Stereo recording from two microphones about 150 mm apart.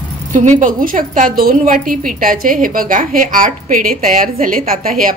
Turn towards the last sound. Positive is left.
turn(degrees=-70)  # may be behind; listen again after turning